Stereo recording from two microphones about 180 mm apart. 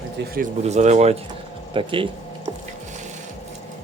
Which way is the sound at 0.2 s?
75° right (ahead or behind).